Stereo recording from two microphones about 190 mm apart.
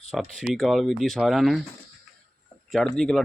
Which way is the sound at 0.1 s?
Centre (ahead or behind).